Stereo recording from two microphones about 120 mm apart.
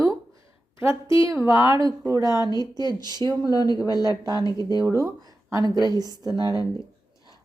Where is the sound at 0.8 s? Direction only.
20° right (ahead or behind); by 3.3 s 35° right (ahead or behind).